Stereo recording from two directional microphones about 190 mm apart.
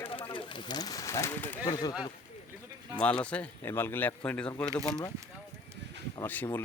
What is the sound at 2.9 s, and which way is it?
Speech, 5° left (ahead or behind).